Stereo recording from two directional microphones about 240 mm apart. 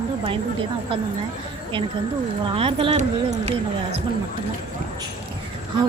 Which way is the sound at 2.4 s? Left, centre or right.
Right.